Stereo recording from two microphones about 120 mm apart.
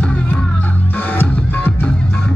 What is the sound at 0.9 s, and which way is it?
Music, 15° left (ahead or behind).